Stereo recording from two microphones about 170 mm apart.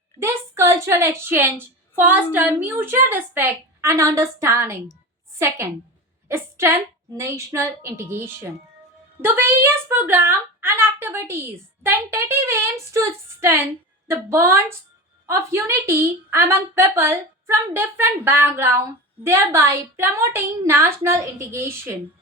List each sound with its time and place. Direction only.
0.2 s a woman's voice: 15° right (ahead or behind)
6.2 s a woman's voice: 15° right (ahead or behind)